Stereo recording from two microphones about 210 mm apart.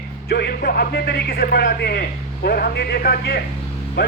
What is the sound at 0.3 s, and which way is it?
A man's voice, 50° left (ahead or behind).